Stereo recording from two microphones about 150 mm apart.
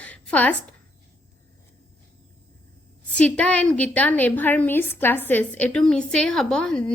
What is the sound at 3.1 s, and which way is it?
A woman's voice, 10° left (ahead or behind).